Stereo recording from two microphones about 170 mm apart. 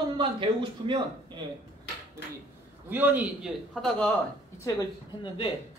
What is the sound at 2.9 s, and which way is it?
A man's voice, 10° right (ahead or behind).